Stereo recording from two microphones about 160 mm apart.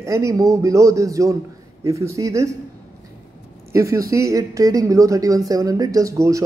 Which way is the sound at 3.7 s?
20° right (ahead or behind).